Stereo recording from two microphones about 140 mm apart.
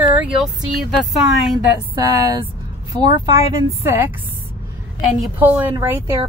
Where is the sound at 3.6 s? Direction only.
15° right (ahead or behind).